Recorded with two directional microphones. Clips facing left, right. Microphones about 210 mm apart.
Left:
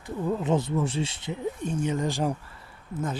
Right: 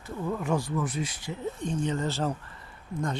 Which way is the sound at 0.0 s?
20° left (ahead or behind).